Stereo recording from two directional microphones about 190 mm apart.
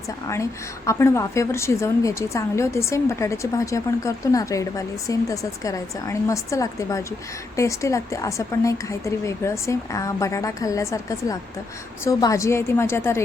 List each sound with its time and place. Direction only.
0.9 s a woman's voice: 15° left (ahead or behind)